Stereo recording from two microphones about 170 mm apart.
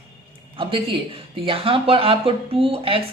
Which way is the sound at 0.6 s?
30° right (ahead or behind).